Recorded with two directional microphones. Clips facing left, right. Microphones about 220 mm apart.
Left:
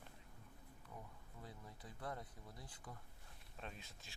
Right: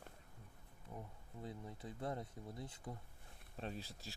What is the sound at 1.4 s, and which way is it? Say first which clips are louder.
Speech: right 8 dB; 25° right (ahead or behind).